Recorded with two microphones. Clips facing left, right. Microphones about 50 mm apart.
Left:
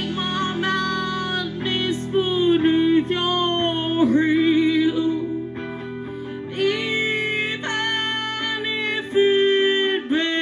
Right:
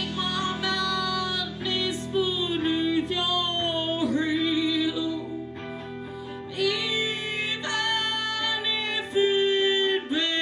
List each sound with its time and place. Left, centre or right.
0.2 s music: left
6.6 s music: left